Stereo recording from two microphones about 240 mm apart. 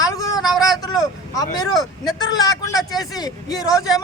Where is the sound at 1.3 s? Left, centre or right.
Centre.